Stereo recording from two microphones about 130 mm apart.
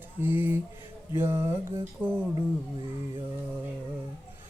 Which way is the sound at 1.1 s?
20° right (ahead or behind).